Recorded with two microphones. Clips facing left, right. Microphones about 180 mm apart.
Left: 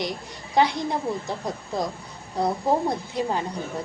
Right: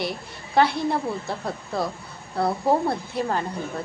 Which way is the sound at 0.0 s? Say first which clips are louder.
Right 1 dB; 15° left (ahead or behind).